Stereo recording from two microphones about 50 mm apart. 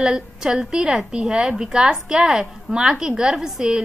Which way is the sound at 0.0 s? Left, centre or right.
Centre.